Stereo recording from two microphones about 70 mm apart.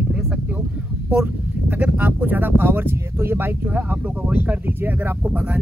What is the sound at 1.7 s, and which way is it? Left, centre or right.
Speech, right.